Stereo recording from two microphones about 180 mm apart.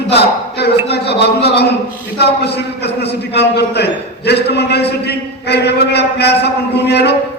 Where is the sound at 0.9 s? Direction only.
65° left (ahead or behind).